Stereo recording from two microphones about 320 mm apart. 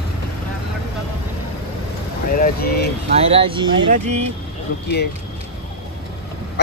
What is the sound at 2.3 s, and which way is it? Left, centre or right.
Speech, left.